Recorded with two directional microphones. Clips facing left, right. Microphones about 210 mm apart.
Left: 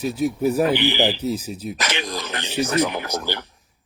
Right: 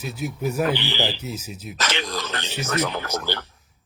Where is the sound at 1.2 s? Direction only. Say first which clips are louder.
Left 8 dB; 35° left (ahead or behind).